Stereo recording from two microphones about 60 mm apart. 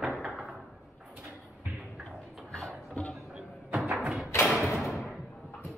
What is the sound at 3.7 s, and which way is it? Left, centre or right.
Music, right.